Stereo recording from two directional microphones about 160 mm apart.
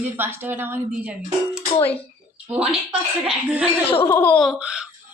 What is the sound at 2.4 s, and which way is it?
A woman's voice, 10° right (ahead or behind).